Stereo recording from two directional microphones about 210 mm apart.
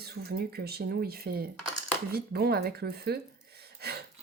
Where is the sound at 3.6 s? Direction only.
50° right (ahead or behind).